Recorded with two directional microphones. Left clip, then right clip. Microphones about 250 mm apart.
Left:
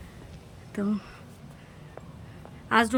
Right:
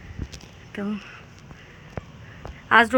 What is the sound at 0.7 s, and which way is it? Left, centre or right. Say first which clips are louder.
Speech: even; centre.